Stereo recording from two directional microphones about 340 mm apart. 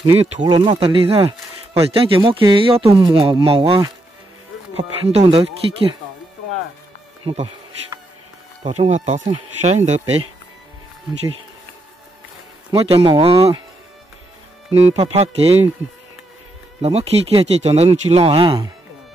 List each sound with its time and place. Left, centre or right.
0.0 s speech: centre
8.6 s speech: centre
12.7 s speech: centre
15.0 s speech: centre
16.8 s speech: centre